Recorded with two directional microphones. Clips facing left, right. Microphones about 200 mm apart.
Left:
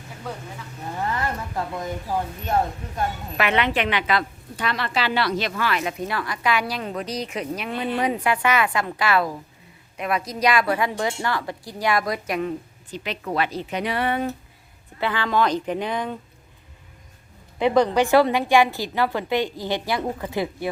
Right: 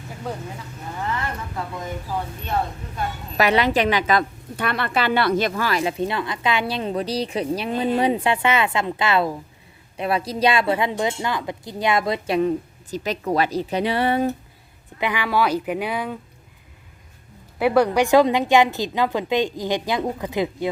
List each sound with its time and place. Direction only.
3.3 s a woman's voice: 35° right (ahead or behind)
15.0 s a woman's voice: 10° right (ahead or behind)
17.6 s a woman's voice: 10° right (ahead or behind)